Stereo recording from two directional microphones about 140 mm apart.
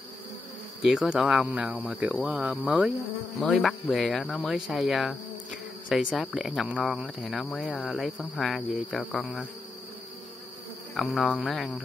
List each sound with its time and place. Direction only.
0.8 s speech: 5° right (ahead or behind)
11.0 s speech: centre (ahead or behind)